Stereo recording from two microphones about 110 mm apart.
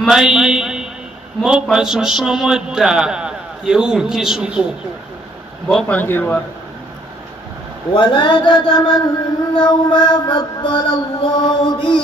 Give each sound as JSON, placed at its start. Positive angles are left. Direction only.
{"t": 0.1, "sound": "a man's voice", "side_deg": -5}
{"t": 5.7, "sound": "speech", "side_deg": 10}
{"t": 7.9, "sound": "mantra", "side_deg": 45}